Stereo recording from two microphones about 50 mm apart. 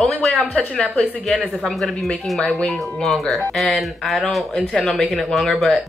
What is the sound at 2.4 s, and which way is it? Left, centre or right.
Speech, centre.